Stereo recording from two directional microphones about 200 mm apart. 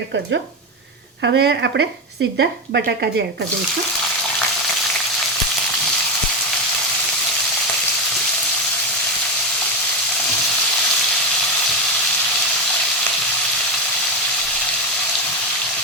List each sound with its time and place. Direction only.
1.2 s speech: 55° right (ahead or behind)